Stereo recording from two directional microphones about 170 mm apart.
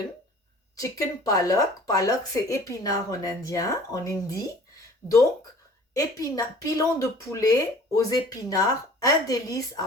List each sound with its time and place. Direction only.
0.8 s speech: 20° left (ahead or behind)
6.0 s speech: 20° left (ahead or behind)